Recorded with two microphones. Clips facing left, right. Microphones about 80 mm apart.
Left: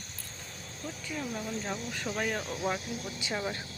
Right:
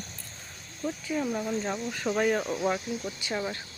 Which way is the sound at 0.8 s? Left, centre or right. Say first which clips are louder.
Right 8 dB; centre.